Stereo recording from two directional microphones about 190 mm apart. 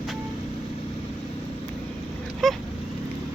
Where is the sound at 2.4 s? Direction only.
Centre (ahead or behind).